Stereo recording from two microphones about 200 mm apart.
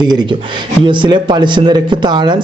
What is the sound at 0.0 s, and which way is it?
Speech, 20° right (ahead or behind).